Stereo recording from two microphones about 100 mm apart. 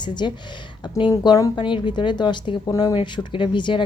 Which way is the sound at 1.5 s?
55° left (ahead or behind).